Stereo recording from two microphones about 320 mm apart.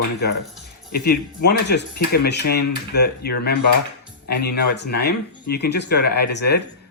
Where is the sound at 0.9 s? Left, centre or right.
Left.